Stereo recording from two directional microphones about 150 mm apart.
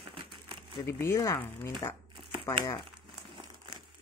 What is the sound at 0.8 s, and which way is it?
Speech, 15° left (ahead or behind).